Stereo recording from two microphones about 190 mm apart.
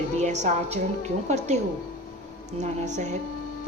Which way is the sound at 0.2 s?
40° right (ahead or behind).